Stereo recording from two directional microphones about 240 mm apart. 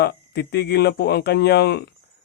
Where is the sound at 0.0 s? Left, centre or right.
Left.